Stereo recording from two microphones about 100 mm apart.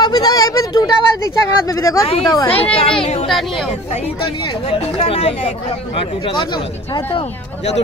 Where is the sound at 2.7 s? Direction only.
65° left (ahead or behind).